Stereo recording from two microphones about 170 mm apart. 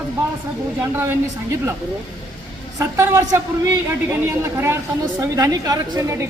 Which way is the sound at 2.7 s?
15° right (ahead or behind).